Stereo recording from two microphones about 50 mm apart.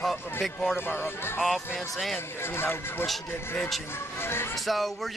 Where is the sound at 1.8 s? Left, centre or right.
Centre.